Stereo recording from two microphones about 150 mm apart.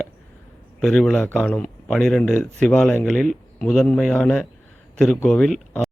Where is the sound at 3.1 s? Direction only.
Centre (ahead or behind).